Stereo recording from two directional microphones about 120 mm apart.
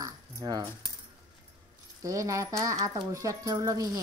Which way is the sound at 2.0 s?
25° right (ahead or behind).